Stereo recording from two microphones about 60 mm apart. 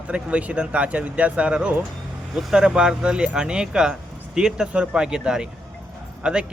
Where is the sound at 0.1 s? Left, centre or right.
Right.